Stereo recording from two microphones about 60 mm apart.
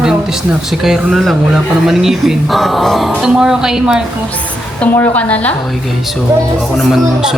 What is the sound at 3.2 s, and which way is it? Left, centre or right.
Speech, centre.